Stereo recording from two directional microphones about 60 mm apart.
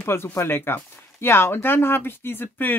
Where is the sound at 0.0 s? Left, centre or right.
Left.